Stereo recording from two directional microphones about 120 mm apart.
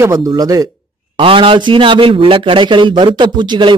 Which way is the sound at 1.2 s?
45° right (ahead or behind).